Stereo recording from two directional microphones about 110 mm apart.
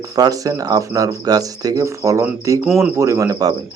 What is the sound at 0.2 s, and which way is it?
Speech, 35° right (ahead or behind).